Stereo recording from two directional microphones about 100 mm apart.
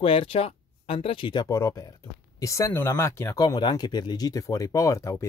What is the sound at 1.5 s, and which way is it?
Speech, 35° left (ahead or behind).